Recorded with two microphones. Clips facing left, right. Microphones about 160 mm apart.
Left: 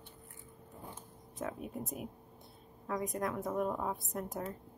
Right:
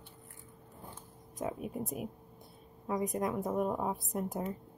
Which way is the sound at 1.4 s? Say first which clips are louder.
Right 3 dB; 15° right (ahead or behind).